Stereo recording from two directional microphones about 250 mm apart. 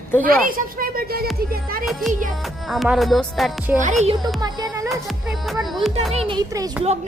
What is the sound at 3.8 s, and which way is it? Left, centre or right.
Speech, right.